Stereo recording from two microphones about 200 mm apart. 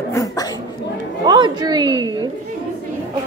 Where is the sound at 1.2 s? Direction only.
25° right (ahead or behind).